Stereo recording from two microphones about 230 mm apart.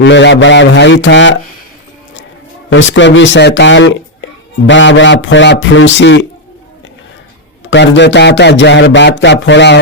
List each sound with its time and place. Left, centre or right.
0.0 s speech: left
2.7 s speech: left
7.6 s speech: left